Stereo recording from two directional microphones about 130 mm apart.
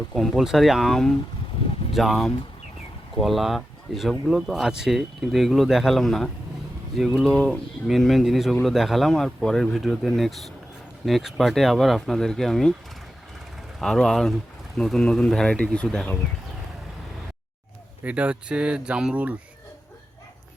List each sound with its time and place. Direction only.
0.1 s speech: centre (ahead or behind)
13.7 s speech: 5° left (ahead or behind)
18.0 s speech: 10° right (ahead or behind)